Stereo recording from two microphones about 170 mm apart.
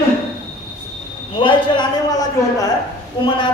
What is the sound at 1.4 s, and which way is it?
A man's voice, 30° left (ahead or behind).